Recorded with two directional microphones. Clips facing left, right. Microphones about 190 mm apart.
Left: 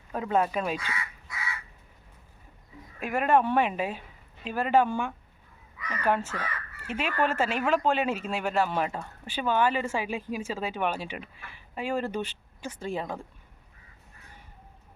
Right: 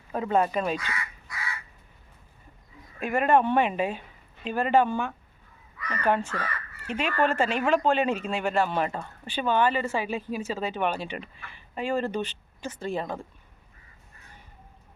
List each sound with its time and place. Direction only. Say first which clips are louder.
0.1 s speech: right 2 dB; centre (ahead or behind)
3.0 s speech: right 2 dB; 5° left (ahead or behind)